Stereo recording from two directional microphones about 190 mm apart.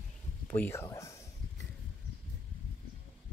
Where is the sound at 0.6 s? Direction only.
15° left (ahead or behind).